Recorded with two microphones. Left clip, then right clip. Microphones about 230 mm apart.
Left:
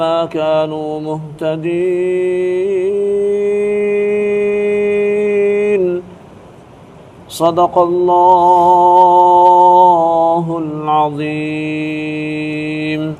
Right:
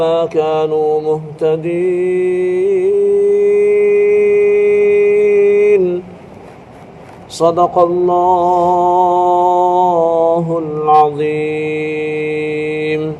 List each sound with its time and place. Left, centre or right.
0.0 s mantra: left
7.3 s mantra: left